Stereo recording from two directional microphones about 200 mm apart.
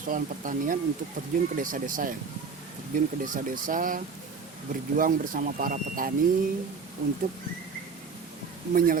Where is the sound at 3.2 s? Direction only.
40° right (ahead or behind).